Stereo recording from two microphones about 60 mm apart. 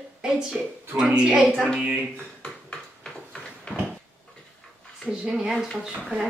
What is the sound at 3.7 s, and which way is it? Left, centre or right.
Cupboard open or close, centre.